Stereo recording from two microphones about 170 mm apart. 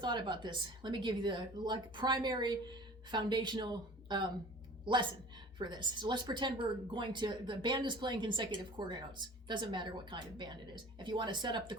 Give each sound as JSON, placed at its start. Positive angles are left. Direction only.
{"t": 0.0, "sound": "a woman's voice", "side_deg": -25}
{"t": 5.5, "sound": "a woman's voice", "side_deg": -25}